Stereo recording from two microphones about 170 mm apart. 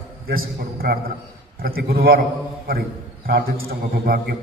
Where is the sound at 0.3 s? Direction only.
60° right (ahead or behind).